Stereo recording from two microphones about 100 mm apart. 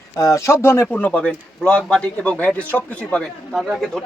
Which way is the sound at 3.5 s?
Centre (ahead or behind).